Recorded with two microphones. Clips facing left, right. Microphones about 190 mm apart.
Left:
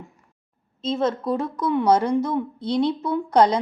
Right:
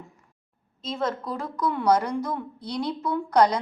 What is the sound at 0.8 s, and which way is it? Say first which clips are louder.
A woman's voice: left 5 dB; 25° left (ahead or behind).